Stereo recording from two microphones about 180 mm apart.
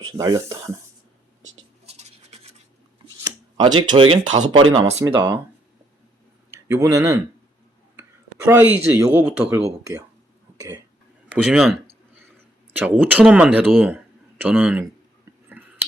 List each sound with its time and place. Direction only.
0.2 s speech: 20° right (ahead or behind)
1.9 s scratch: 35° right (ahead or behind)
3.2 s speech: 25° right (ahead or behind)
6.5 s a man's voice: 15° right (ahead or behind)
8.4 s speech: 15° right (ahead or behind)
11.3 s speech: 5° right (ahead or behind)
15.6 s a sound: 10° right (ahead or behind)